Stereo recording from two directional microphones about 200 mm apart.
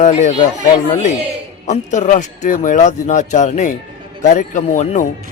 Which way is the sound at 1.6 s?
40° left (ahead or behind).